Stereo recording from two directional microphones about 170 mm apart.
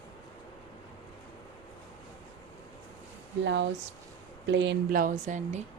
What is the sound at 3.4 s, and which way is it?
Speech, 90° right.